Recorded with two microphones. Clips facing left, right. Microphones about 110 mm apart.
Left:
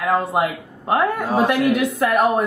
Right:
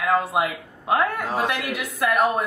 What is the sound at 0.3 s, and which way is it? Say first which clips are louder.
A man's voice: left 3 dB; centre (ahead or behind).